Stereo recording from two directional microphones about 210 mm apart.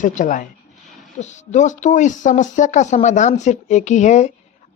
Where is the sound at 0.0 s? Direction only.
35° left (ahead or behind).